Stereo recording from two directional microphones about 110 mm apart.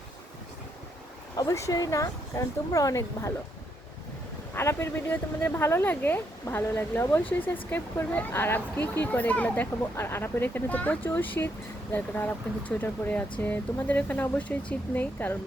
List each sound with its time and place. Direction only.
1.4 s speech: 30° left (ahead or behind)
4.5 s speech: 25° left (ahead or behind)